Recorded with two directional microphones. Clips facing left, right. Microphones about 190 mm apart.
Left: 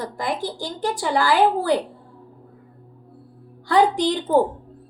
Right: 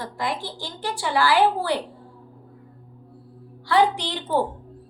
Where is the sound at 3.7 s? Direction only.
45° left (ahead or behind).